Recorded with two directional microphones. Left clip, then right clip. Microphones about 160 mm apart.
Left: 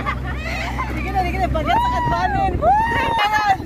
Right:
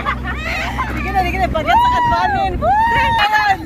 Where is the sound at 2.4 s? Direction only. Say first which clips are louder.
Right 2 dB; 45° left (ahead or behind).